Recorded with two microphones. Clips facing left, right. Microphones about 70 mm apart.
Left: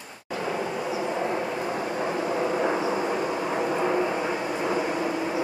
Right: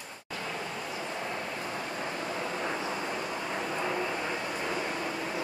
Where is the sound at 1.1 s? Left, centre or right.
Left.